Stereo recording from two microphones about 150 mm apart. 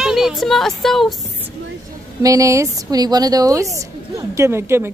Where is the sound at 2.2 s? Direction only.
20° right (ahead or behind).